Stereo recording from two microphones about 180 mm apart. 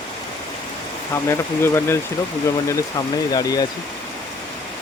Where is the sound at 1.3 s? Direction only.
15° left (ahead or behind).